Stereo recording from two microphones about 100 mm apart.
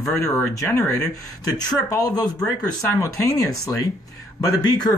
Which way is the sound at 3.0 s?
30° left (ahead or behind).